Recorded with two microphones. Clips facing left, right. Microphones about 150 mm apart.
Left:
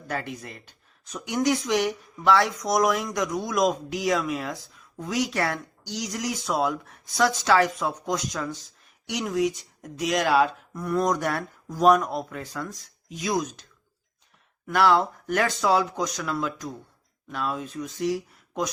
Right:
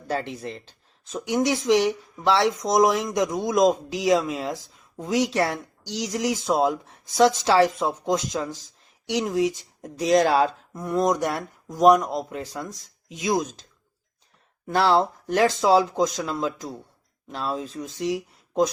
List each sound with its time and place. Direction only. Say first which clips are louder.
0.1 s speech: right 4 dB; 25° right (ahead or behind)
10.8 s speech: right 2 dB; 20° right (ahead or behind)
14.7 s speech: right 1 dB; 30° right (ahead or behind)